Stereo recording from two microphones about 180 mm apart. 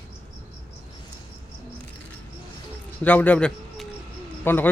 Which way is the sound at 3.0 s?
10° left (ahead or behind).